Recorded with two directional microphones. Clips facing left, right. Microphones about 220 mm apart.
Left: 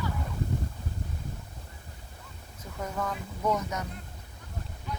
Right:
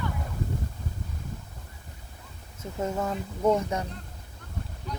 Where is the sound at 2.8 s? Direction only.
25° right (ahead or behind).